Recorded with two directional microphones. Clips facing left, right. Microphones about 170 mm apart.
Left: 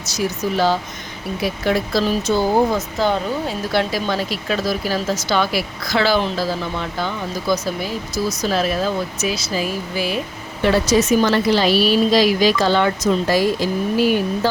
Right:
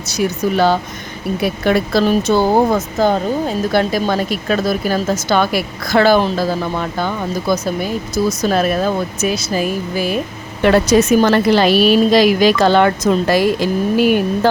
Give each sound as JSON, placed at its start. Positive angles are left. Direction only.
{"t": 0.0, "sound": "speech", "side_deg": -60}